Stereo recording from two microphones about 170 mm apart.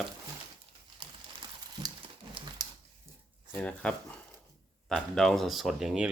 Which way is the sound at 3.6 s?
5° left (ahead or behind).